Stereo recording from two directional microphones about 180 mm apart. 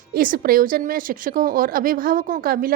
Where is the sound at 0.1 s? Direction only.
50° right (ahead or behind).